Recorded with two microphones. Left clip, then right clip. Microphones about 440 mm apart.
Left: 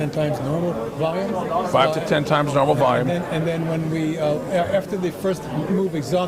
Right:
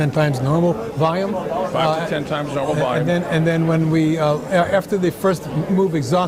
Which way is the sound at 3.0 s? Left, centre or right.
Right.